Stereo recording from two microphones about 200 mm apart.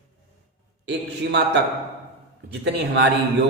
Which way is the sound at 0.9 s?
60° right (ahead or behind).